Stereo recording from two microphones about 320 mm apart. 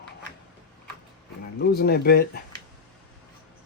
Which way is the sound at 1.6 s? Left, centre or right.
Left.